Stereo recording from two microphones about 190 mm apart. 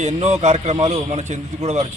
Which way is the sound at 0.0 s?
35° right (ahead or behind).